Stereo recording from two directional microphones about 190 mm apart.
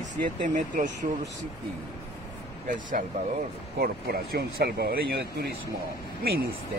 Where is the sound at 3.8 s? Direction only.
55° right (ahead or behind).